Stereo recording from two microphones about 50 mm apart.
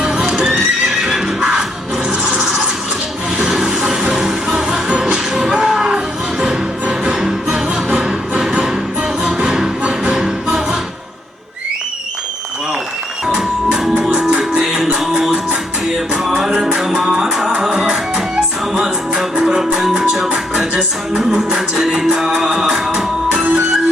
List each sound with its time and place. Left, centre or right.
0.0 s horse: centre
1.0 s neigh: centre
2.2 s a sound: centre
3.3 s music: centre
13.2 s music: centre
16.4 s music: centre
23.3 s music: right